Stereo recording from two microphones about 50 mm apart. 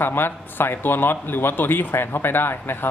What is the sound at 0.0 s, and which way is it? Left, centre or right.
A man's voice, left.